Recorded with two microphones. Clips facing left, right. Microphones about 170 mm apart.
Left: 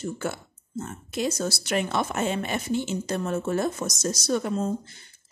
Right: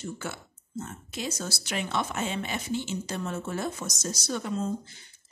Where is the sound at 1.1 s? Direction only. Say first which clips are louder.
Left 8 dB; 55° left (ahead or behind).